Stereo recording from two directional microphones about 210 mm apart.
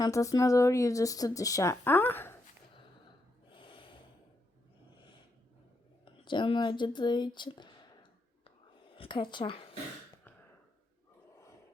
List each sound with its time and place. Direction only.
0.0 s speech: 15° left (ahead or behind)
3.5 s snort: 25° left (ahead or behind)
6.2 s speech: 20° left (ahead or behind)
9.0 s speech: 20° left (ahead or behind)